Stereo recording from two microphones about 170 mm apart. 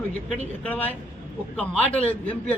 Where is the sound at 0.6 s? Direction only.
10° left (ahead or behind).